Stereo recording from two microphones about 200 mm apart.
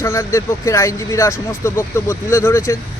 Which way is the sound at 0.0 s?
15° left (ahead or behind).